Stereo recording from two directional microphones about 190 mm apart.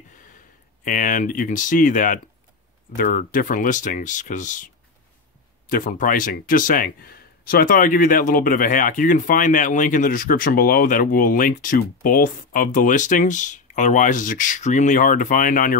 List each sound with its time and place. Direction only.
0.8 s speech: 45° left (ahead or behind)
5.7 s speech: 45° left (ahead or behind)